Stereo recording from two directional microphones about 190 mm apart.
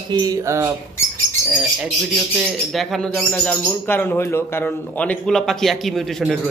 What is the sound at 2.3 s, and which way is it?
Speech, centre (ahead or behind).